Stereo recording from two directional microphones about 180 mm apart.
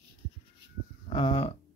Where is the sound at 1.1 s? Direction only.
30° left (ahead or behind).